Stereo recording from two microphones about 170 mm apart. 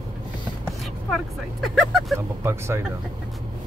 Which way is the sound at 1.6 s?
Centre (ahead or behind).